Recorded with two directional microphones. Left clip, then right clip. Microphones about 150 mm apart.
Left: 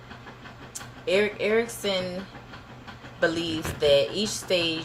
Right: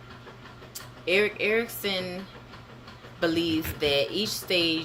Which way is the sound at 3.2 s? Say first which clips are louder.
Even; 15° right (ahead or behind).